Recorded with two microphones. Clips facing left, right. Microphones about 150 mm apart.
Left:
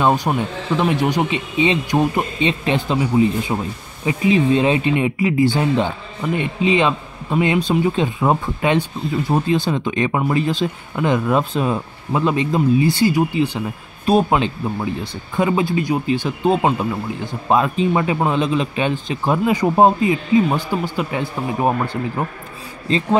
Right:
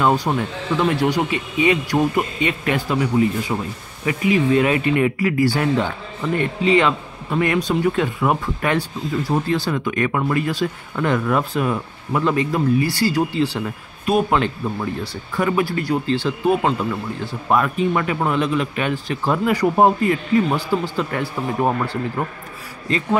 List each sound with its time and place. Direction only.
0.0 s speech: 20° left (ahead or behind)